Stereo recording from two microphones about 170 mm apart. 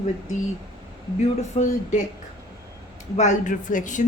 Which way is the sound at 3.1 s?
45° left (ahead or behind).